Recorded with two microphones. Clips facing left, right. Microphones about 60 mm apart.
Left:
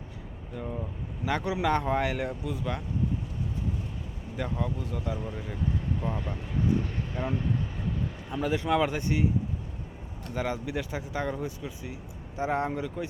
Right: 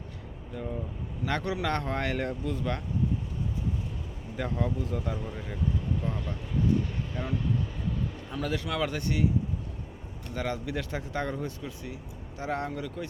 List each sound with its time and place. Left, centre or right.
0.5 s speech: centre
4.4 s speech: centre
6.0 s speech: left
10.3 s speech: centre
12.4 s speech: left